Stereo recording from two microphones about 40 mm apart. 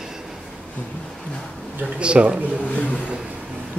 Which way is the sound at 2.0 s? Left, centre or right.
Right.